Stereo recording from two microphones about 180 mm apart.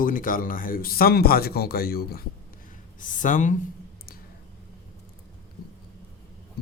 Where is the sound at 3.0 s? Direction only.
45° left (ahead or behind).